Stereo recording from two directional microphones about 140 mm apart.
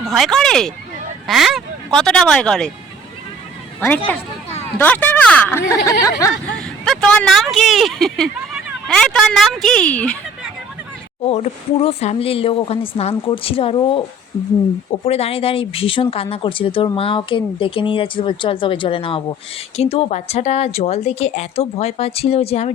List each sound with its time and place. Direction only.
0.1 s speech: centre (ahead or behind)
3.8 s a woman's voice: 15° left (ahead or behind)
6.5 s speech: 5° left (ahead or behind)
11.2 s speech: 50° left (ahead or behind)
15.0 s speech: 45° left (ahead or behind)